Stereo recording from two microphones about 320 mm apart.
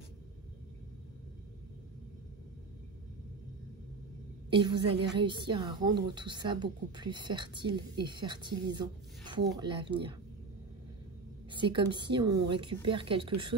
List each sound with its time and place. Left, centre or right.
4.5 s a woman's voice: centre
11.5 s speech: centre